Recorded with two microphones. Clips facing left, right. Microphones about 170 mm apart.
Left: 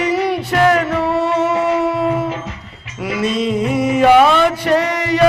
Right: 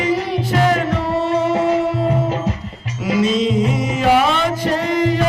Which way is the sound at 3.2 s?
60° left (ahead or behind).